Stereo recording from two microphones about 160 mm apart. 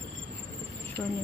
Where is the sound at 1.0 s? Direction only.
25° left (ahead or behind).